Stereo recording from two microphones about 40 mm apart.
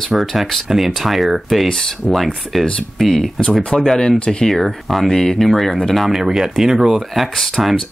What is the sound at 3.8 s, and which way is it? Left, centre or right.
Speech, centre.